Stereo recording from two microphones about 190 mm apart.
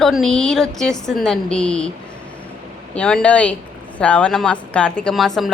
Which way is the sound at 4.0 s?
5° left (ahead or behind).